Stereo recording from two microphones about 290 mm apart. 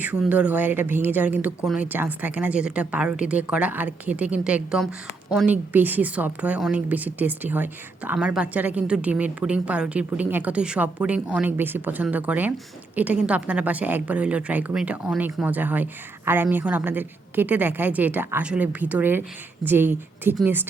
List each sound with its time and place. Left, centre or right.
0.0 s a woman's voice: centre